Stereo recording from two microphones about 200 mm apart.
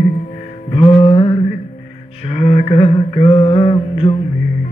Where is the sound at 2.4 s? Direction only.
30° left (ahead or behind).